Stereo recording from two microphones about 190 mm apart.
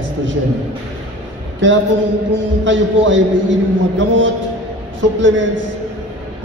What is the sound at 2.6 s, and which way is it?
A man's voice, 75° right (ahead or behind).